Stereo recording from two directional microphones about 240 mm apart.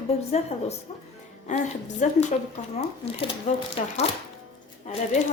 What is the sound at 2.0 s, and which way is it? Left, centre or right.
Speech, left.